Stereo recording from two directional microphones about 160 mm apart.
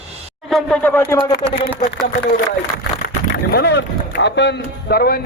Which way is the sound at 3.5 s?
90° left.